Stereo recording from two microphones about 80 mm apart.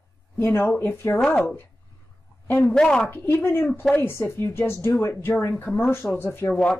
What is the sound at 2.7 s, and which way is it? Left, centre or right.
Speech, centre.